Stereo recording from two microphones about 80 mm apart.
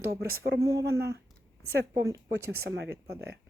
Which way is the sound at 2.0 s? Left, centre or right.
Right.